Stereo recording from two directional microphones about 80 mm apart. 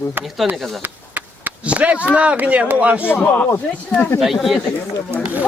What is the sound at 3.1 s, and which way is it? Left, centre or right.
Speech, left.